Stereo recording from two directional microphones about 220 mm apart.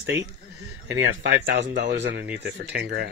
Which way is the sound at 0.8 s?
55° right (ahead or behind).